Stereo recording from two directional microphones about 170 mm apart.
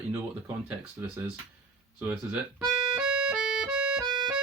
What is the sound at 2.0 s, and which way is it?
Speech, 5° right (ahead or behind).